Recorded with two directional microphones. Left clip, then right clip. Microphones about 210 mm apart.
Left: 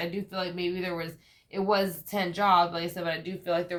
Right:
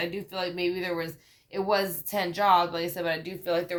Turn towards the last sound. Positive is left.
turn(degrees=-35)  # may be behind; listen again after turning